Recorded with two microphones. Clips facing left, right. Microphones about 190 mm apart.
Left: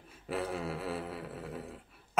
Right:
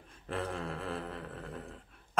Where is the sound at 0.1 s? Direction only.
5° left (ahead or behind).